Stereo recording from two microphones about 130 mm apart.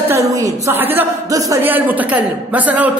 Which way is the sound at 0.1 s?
20° right (ahead or behind).